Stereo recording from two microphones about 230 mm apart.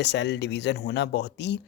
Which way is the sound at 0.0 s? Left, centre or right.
Left.